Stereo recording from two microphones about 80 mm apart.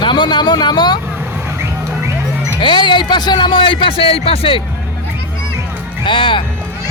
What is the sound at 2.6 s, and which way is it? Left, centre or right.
Speech, left.